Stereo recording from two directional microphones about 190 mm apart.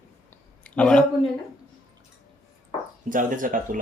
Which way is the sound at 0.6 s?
5° left (ahead or behind).